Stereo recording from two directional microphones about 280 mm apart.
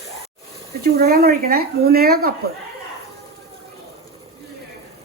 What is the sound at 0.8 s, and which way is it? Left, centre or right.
Speech, right.